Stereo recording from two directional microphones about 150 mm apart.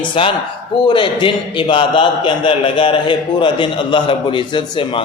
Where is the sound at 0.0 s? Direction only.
35° left (ahead or behind).